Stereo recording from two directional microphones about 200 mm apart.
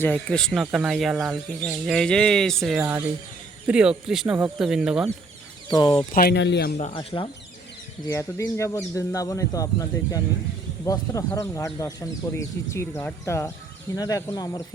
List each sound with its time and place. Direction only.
0.0 s speech: 5° left (ahead or behind)
5.7 s speech: 20° left (ahead or behind)
6.1 s speech: 55° left (ahead or behind)
6.7 s speech: 30° left (ahead or behind)
8.1 s speech: 15° left (ahead or behind)